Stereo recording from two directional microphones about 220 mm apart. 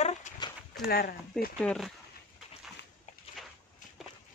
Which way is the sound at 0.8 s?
45° left (ahead or behind).